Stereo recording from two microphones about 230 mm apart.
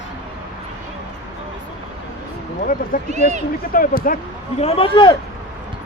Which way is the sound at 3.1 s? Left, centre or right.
Right.